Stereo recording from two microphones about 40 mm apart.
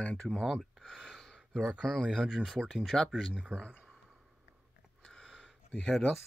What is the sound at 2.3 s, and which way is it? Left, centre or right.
Speech, centre.